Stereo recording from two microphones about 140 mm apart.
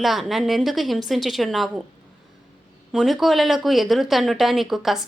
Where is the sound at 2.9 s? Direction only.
Centre (ahead or behind).